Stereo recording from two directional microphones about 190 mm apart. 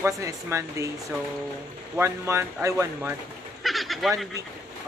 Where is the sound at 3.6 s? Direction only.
Centre (ahead or behind).